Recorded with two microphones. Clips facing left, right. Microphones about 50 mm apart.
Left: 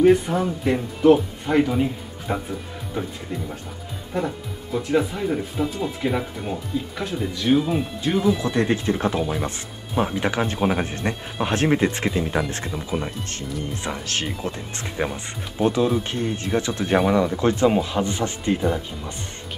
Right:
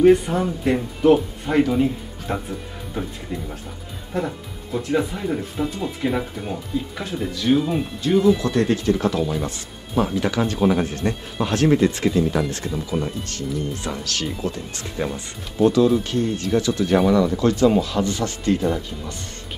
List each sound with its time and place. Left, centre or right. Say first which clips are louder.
0.0 s speech: right 2 dB; centre; by 12.8 s left
14.0 s speech: right 1 dB; left